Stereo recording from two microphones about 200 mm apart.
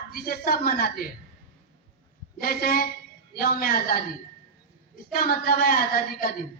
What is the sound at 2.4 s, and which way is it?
A woman's voice, 45° left (ahead or behind).